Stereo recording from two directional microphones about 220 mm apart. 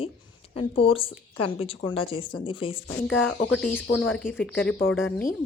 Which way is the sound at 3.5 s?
5° left (ahead or behind).